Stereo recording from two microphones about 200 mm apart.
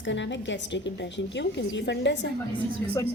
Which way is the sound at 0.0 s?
65° left (ahead or behind).